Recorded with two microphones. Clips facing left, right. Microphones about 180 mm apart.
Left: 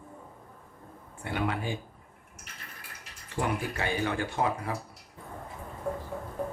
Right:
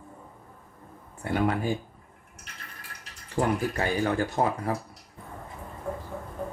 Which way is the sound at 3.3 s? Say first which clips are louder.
Right 5 dB; 40° right (ahead or behind).